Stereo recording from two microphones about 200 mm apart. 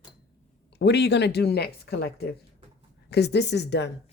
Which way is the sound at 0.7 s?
55° left (ahead or behind).